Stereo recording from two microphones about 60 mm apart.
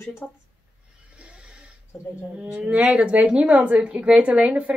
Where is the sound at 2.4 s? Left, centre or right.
Right.